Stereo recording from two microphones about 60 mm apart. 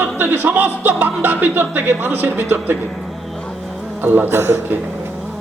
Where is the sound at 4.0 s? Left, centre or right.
Right.